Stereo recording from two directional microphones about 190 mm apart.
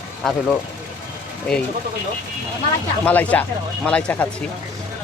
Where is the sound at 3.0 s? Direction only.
10° left (ahead or behind).